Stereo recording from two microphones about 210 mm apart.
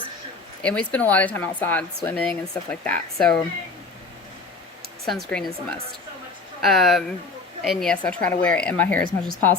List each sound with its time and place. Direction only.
0.6 s speech: 5° left (ahead or behind)
5.0 s speech: centre (ahead or behind)